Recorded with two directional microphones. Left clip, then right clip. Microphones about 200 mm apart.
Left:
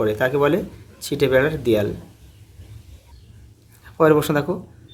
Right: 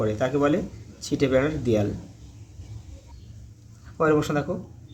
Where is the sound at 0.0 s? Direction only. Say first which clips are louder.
Left 5 dB; 40° left (ahead or behind).